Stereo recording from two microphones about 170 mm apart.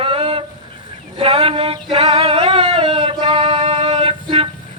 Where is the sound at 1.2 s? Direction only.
35° right (ahead or behind).